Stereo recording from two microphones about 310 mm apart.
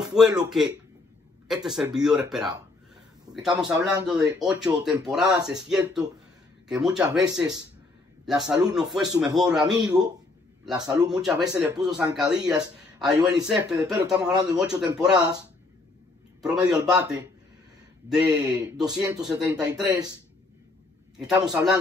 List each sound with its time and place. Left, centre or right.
0.0 s a sound: centre
0.3 s speech: centre
3.4 s speech: centre
8.3 s speech: centre
16.7 s speech: centre
21.2 s speech: centre